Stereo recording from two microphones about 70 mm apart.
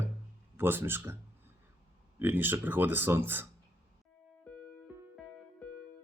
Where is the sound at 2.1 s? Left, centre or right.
Right.